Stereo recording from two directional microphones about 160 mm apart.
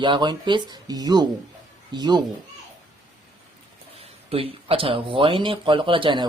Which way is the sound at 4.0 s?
35° right (ahead or behind).